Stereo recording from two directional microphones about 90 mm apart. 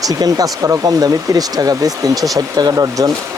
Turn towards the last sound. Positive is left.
turn(degrees=-40)  # may be behind; listen again after turning